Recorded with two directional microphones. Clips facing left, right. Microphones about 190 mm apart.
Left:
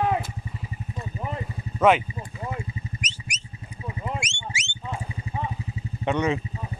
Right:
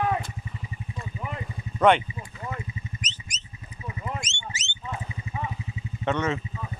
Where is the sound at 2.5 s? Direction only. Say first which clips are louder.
Left 2 dB; 10° left (ahead or behind).